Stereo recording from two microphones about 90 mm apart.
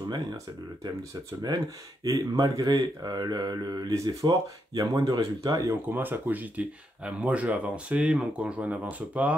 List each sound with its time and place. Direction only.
0.1 s speech: 45° right (ahead or behind)
5.9 s speech: 20° right (ahead or behind)